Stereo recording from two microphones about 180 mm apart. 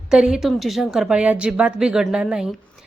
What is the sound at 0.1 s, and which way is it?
Speech, 5° right (ahead or behind).